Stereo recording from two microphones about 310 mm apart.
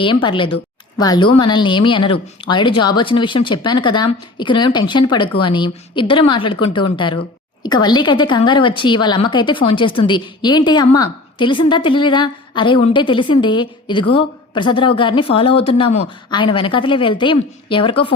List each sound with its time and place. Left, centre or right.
0.0 s a woman's voice: centre